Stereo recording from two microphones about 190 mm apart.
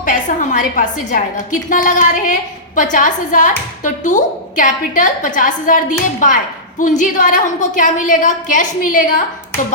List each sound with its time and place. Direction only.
0.0 s a woman's voice: 40° left (ahead or behind)